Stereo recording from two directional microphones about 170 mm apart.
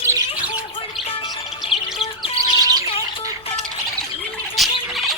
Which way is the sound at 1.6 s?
30° left (ahead or behind).